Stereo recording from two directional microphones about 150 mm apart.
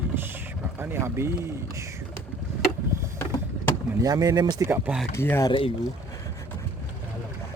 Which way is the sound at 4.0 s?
25° right (ahead or behind).